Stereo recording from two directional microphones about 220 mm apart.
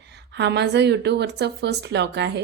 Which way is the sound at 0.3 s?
50° right (ahead or behind).